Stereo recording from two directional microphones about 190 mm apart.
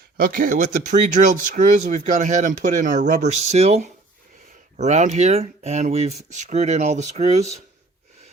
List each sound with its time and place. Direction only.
0.2 s speech: 45° right (ahead or behind)